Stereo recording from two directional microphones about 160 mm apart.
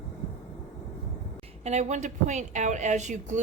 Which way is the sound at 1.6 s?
45° right (ahead or behind).